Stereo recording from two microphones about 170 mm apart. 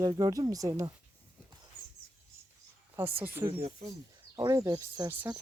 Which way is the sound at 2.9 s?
15° right (ahead or behind).